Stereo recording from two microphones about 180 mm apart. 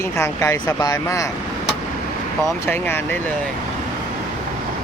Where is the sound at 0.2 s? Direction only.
15° left (ahead or behind).